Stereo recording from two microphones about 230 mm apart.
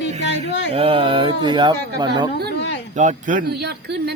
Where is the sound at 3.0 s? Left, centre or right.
Right.